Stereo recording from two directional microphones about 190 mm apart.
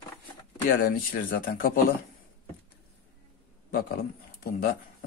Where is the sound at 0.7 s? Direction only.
50° left (ahead or behind).